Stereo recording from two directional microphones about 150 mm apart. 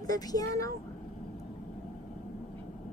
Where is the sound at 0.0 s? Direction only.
25° left (ahead or behind).